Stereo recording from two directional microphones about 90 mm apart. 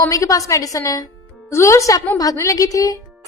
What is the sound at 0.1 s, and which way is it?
A woman's voice, 40° left (ahead or behind).